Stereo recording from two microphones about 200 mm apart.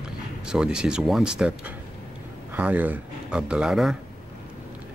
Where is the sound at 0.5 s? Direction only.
5° right (ahead or behind).